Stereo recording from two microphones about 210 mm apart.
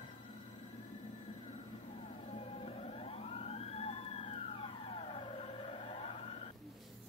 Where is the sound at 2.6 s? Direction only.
30° left (ahead or behind).